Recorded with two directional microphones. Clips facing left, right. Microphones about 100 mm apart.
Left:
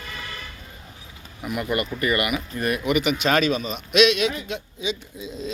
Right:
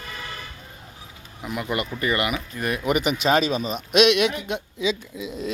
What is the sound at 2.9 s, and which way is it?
A man's voice, 40° right (ahead or behind).